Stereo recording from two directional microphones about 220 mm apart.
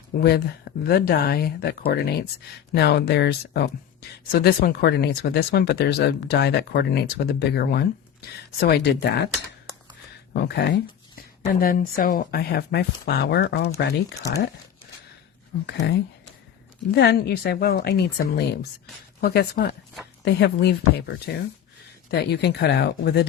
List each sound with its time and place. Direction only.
0.2 s speech: 45° left (ahead or behind)
10.3 s speech: 50° left (ahead or behind)
14.2 s speech: 15° left (ahead or behind)
15.6 s speech: 50° left (ahead or behind)